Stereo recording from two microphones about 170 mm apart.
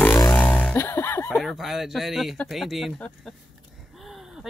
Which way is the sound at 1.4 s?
Centre (ahead or behind).